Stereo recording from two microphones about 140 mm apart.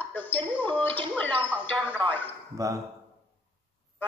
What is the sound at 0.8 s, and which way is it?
Speech, 10° left (ahead or behind).